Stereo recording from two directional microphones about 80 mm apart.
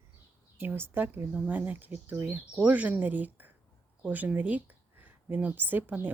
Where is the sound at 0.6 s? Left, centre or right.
Right.